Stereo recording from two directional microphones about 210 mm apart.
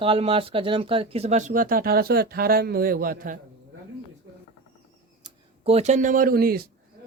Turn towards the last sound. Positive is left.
turn(degrees=-45)  # may be behind; listen again after turning